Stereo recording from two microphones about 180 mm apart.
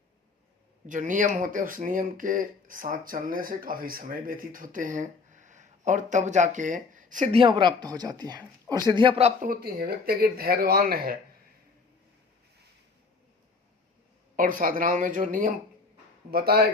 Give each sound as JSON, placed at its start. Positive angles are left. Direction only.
{"t": 0.9, "sound": "speech", "side_deg": -45}
{"t": 7.3, "sound": "speech", "side_deg": -25}
{"t": 9.4, "sound": "speech", "side_deg": -55}
{"t": 14.3, "sound": "speech", "side_deg": -50}
{"t": 16.3, "sound": "speech", "side_deg": -60}